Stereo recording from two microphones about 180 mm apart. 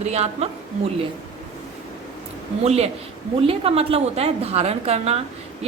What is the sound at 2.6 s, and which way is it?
A woman's voice, 35° right (ahead or behind).